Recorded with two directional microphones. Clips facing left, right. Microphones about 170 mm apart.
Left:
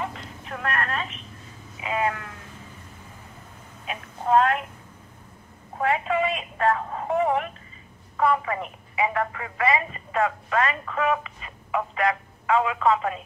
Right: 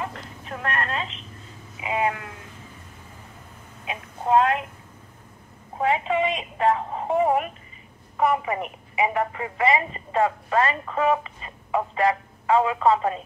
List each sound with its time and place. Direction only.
0.1 s a sound: centre (ahead or behind)
0.7 s a woman's voice: 15° right (ahead or behind)
3.9 s speech: 10° right (ahead or behind)
5.8 s speech: 20° right (ahead or behind)